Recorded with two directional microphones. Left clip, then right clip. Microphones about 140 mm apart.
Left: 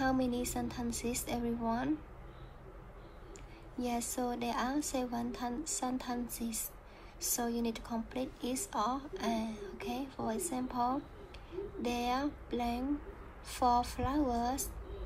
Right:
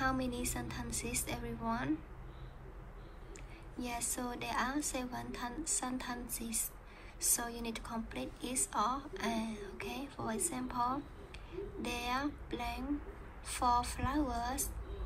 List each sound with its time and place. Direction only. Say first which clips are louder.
0.0 s a woman's voice: left 3 dB; 20° left (ahead or behind)
3.7 s a woman's voice: left 4 dB; 20° left (ahead or behind)